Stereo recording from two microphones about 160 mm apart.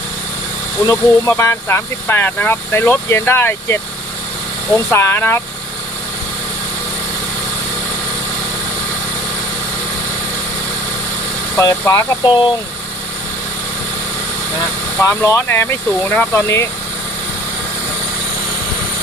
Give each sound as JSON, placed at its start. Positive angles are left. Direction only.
{"t": 0.9, "sound": "speech", "side_deg": 15}
{"t": 4.9, "sound": "speech", "side_deg": 15}
{"t": 11.5, "sound": "speech", "side_deg": 20}
{"t": 14.9, "sound": "speech", "side_deg": 15}